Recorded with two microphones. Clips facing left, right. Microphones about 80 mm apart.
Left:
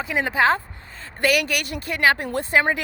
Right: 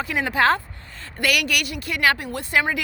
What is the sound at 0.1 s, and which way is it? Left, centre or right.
A woman's voice, left.